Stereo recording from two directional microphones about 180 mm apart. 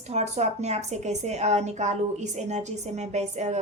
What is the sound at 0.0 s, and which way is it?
A woman's voice, 40° right (ahead or behind).